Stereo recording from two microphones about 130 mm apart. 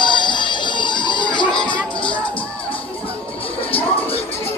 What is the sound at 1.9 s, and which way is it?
Music, 40° left (ahead or behind).